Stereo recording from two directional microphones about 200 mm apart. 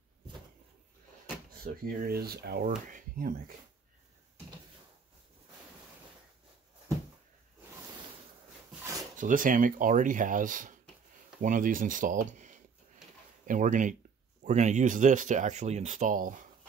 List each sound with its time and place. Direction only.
1.6 s speech: 45° right (ahead or behind)
9.1 s speech: 40° right (ahead or behind)